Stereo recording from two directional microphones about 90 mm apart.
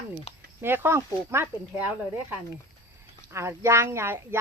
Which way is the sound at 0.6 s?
25° right (ahead or behind).